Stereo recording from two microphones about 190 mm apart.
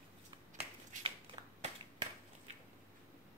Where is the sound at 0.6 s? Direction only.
30° right (ahead or behind).